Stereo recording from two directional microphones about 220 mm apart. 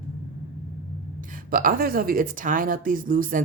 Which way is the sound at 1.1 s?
40° right (ahead or behind).